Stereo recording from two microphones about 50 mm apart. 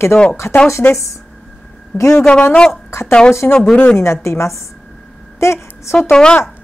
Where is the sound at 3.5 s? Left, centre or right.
Centre.